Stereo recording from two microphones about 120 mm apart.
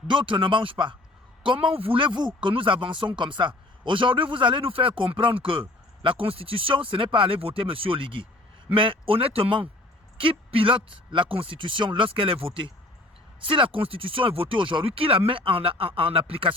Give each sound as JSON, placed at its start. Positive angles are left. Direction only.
{"t": 0.1, "sound": "speech", "side_deg": -45}